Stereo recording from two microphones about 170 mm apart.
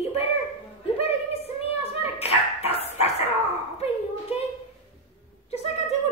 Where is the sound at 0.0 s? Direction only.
40° left (ahead or behind).